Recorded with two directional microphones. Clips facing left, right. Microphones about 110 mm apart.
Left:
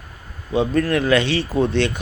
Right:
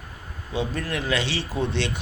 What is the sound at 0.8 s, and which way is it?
Speech, 65° left (ahead or behind).